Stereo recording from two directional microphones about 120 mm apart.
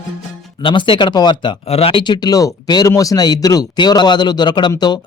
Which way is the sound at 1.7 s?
50° left (ahead or behind).